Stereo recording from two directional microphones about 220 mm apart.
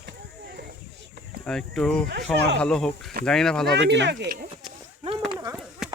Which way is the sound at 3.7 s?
50° right (ahead or behind).